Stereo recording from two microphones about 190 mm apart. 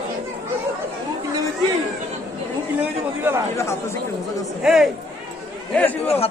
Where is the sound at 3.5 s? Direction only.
15° left (ahead or behind).